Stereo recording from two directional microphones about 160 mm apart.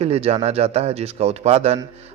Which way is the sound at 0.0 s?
40° right (ahead or behind).